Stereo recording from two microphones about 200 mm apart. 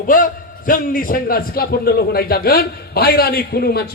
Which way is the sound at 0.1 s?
45° left (ahead or behind).